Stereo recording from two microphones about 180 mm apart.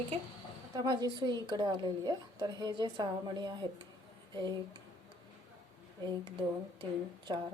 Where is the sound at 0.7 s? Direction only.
20° right (ahead or behind).